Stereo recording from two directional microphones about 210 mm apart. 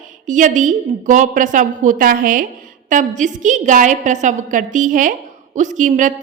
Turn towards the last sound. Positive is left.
turn(degrees=-35)  # may be behind; listen again after turning